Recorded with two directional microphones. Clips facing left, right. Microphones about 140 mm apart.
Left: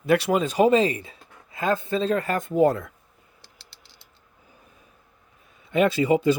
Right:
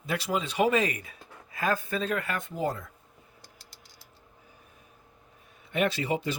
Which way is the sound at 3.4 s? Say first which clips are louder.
Right 1 dB; 30° left (ahead or behind).